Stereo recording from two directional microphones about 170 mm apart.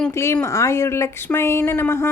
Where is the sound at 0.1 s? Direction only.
15° left (ahead or behind).